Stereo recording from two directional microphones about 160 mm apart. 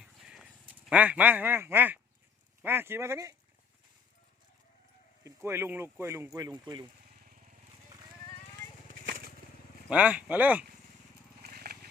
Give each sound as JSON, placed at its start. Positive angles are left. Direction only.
{"t": 0.0, "sound": "a sound", "side_deg": -5}
{"t": 2.6, "sound": "speech", "side_deg": -15}
{"t": 5.2, "sound": "speech", "side_deg": -15}
{"t": 7.3, "sound": "vehicle", "side_deg": -55}
{"t": 9.9, "sound": "speech", "side_deg": -5}
{"t": 11.4, "sound": "a sound", "side_deg": -70}